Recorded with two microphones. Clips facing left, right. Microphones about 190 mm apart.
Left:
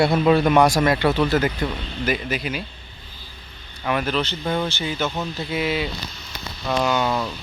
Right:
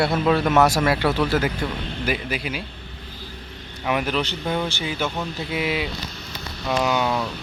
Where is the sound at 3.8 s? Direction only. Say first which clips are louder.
Even; 15° right (ahead or behind).